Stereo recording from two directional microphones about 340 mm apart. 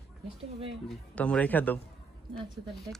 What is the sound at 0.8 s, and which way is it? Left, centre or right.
Speech, centre.